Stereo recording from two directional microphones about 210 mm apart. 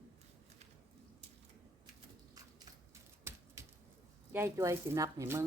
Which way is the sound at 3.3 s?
10° right (ahead or behind).